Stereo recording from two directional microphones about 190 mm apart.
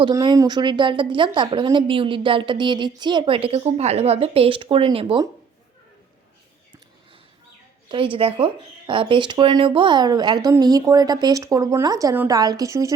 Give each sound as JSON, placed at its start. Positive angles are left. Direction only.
{"t": 0.0, "sound": "speech", "side_deg": -20}
{"t": 7.9, "sound": "speech", "side_deg": -25}